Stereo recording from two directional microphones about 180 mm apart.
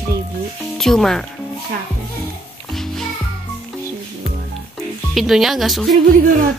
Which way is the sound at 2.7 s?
Centre (ahead or behind).